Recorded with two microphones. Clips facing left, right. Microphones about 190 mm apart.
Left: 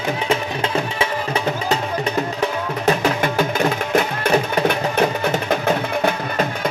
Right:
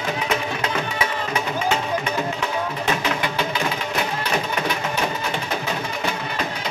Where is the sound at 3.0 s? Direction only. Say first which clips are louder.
Left 5 dB; 45° left (ahead or behind).